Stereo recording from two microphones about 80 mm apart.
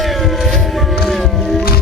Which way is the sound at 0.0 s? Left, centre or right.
Centre.